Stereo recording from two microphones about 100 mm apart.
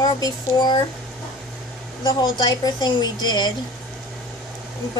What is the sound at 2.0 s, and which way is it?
A woman's voice, 45° left (ahead or behind).